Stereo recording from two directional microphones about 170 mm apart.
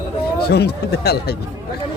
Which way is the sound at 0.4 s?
75° left (ahead or behind).